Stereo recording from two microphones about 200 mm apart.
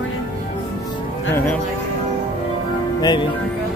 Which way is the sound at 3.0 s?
20° left (ahead or behind).